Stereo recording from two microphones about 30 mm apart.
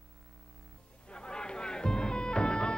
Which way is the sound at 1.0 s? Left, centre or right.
Left.